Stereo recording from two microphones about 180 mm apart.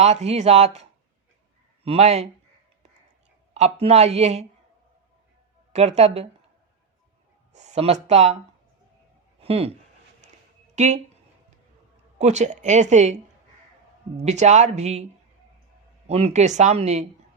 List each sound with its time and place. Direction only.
0.0 s speech: 40° right (ahead or behind)
3.5 s speech: 35° right (ahead or behind)
5.7 s speech: 35° right (ahead or behind)
7.5 s speech: 40° right (ahead or behind)
9.4 s speech: 35° right (ahead or behind)
10.8 s speech: 40° right (ahead or behind)
12.2 s speech: 40° right (ahead or behind)
14.2 s speech: 40° right (ahead or behind)
16.0 s speech: 35° right (ahead or behind)